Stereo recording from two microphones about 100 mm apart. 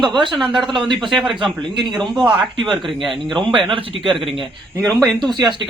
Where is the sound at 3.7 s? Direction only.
65° right (ahead or behind).